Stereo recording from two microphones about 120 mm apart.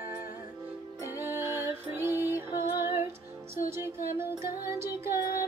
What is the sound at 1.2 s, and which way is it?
Music, 15° right (ahead or behind).